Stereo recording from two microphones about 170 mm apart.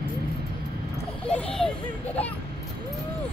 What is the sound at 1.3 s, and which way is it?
A child's voice, 5° left (ahead or behind).